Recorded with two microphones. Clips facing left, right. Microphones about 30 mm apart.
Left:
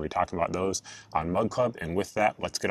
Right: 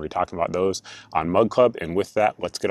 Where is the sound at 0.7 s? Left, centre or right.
Right.